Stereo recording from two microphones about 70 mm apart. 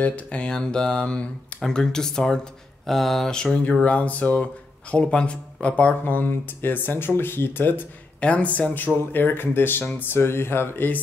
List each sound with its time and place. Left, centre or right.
0.0 s speech: centre